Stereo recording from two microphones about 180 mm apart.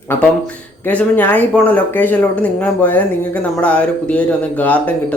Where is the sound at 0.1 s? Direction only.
10° left (ahead or behind).